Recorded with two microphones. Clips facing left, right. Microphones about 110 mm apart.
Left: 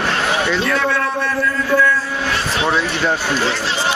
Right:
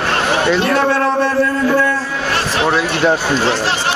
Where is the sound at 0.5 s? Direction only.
60° right (ahead or behind).